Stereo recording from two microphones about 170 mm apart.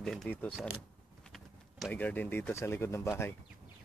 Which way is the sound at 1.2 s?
Centre (ahead or behind).